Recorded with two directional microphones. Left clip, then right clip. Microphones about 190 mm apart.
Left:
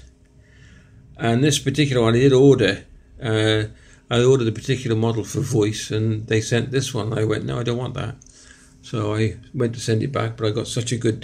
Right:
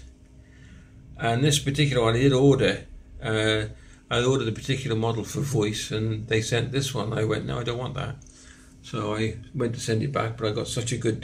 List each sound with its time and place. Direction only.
1.1 s speech: 50° left (ahead or behind)